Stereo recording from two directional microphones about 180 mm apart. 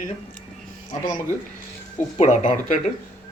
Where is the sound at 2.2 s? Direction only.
45° left (ahead or behind).